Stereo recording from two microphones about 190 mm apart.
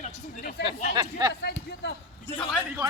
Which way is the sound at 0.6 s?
60° left (ahead or behind).